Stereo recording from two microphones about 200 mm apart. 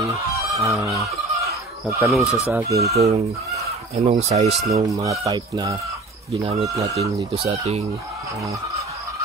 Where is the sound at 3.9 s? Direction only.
35° right (ahead or behind).